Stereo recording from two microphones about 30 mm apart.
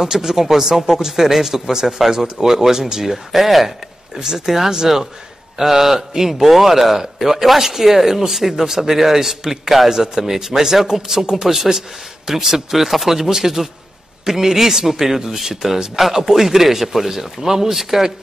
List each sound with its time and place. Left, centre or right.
0.0 s a man's voice: centre
2.0 s a man's voice: centre
3.3 s a man's voice: centre